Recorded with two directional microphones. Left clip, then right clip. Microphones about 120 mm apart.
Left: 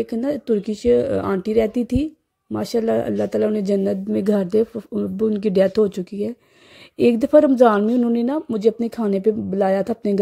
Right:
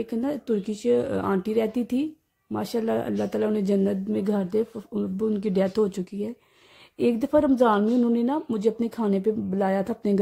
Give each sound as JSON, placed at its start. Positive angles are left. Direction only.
{"t": 0.0, "sound": "speech", "side_deg": 30}